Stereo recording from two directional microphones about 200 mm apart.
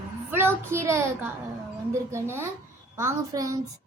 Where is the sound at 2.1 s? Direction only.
15° right (ahead or behind).